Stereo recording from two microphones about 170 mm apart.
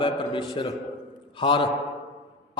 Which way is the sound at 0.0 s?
25° left (ahead or behind).